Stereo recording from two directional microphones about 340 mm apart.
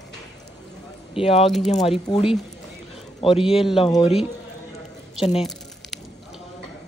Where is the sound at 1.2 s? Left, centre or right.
Centre.